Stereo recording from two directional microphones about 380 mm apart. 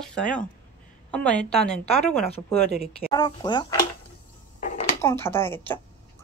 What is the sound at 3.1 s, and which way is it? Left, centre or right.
Speech, centre.